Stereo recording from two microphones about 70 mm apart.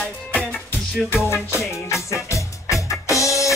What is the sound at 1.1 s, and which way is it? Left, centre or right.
Music, left.